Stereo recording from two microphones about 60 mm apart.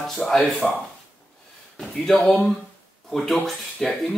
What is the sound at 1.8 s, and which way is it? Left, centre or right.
Speech, centre.